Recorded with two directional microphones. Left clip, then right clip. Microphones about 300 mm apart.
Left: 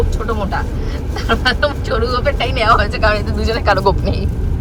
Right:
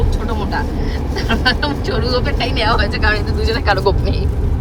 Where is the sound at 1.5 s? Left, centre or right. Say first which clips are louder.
Left 1 dB; centre.